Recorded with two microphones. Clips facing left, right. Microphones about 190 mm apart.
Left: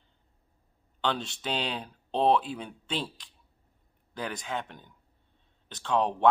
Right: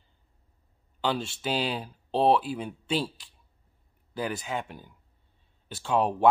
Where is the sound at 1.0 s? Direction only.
5° right (ahead or behind).